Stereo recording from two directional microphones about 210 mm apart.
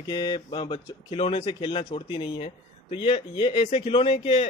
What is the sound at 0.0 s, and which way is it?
Speech, 20° left (ahead or behind).